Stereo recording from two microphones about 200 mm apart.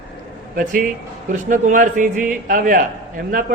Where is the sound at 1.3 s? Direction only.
40° right (ahead or behind).